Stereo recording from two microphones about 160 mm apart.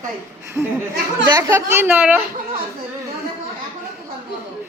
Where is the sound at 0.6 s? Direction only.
20° right (ahead or behind).